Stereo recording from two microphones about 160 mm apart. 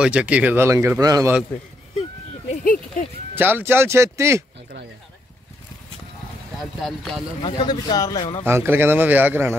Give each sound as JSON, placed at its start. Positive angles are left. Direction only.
{"t": 0.0, "sound": "speech", "side_deg": -10}
{"t": 2.5, "sound": "a sound", "side_deg": 55}
{"t": 3.3, "sound": "speech", "side_deg": -10}
{"t": 6.6, "sound": "speech", "side_deg": 0}
{"t": 7.4, "sound": "speech", "side_deg": 30}
{"t": 8.5, "sound": "speech", "side_deg": -15}